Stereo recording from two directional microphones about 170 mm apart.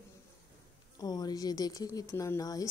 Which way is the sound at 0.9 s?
25° left (ahead or behind).